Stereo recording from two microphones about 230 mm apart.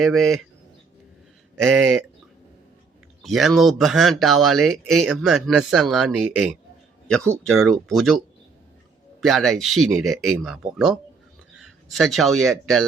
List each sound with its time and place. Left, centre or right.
0.0 s speech: centre
1.6 s speech: centre
3.2 s speech: centre
9.2 s speech: centre